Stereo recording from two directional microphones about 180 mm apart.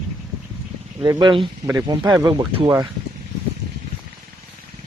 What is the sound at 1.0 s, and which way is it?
Speech, 25° right (ahead or behind).